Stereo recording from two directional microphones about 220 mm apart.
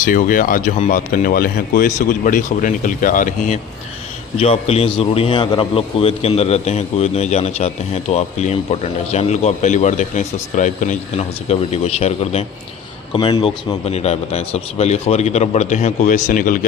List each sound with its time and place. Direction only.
0.0 s a man's voice: 40° left (ahead or behind)